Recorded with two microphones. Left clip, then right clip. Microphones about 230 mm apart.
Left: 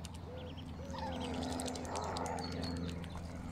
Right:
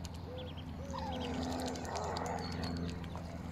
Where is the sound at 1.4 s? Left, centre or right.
Centre.